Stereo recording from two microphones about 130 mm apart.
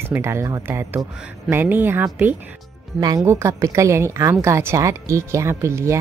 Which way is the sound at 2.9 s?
30° right (ahead or behind).